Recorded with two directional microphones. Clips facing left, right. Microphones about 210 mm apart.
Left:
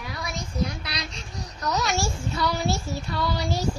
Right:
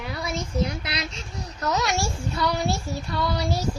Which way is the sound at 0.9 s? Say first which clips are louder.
Right 3 dB; 30° right (ahead or behind).